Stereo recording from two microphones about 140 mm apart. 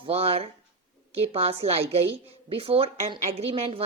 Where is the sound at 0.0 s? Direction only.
45° right (ahead or behind).